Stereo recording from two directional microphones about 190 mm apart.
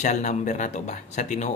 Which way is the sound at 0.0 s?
40° left (ahead or behind).